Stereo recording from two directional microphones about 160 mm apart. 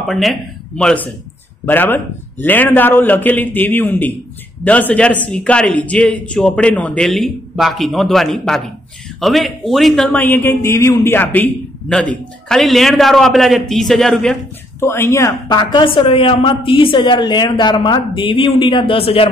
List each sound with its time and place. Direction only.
0.1 s a man's voice: centre (ahead or behind)
14.8 s a woman's voice: 15° left (ahead or behind); by 19.2 s 35° left (ahead or behind)